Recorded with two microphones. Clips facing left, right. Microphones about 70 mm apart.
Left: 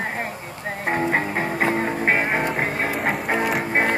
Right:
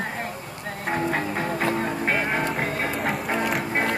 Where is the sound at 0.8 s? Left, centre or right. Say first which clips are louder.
Left 3 dB; left.